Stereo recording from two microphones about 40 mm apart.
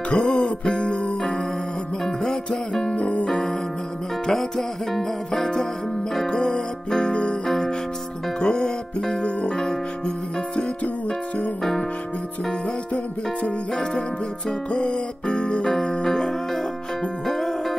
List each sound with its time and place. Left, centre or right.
0.1 s music: left
2.0 s music: centre
3.0 s music: left
3.3 s music: centre
6.2 s music: centre
7.4 s music: centre
8.4 s music: left
9.5 s music: centre
10.8 s music: left
14.7 s music: left; by 17.7 s centre